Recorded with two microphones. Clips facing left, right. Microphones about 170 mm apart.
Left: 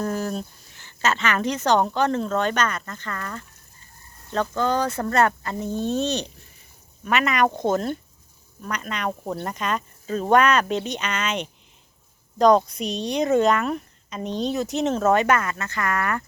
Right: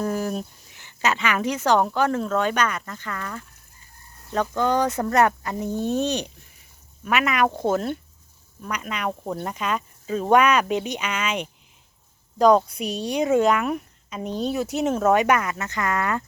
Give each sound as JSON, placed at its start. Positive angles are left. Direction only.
{"t": 0.0, "sound": "speech", "side_deg": -10}